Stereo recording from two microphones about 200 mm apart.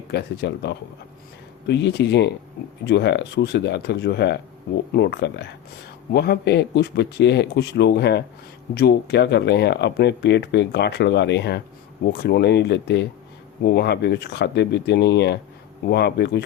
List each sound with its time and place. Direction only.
0.1 s speech: 55° left (ahead or behind)